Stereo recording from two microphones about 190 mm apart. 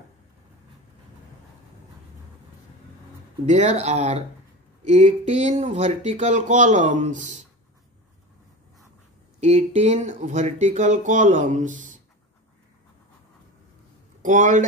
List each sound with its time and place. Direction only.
3.4 s speech: 40° right (ahead or behind)
9.4 s speech: 35° right (ahead or behind)
14.2 s speech: 40° right (ahead or behind)